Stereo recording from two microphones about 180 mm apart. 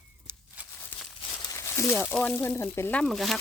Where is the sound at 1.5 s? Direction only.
15° left (ahead or behind).